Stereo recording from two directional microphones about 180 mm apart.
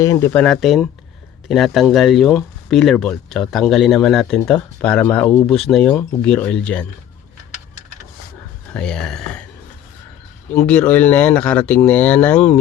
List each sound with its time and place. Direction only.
0.0 s speech: 15° left (ahead or behind)
0.3 s speech: 5° left (ahead or behind)
8.7 s speech: 5° left (ahead or behind)
10.5 s speech: 5° left (ahead or behind)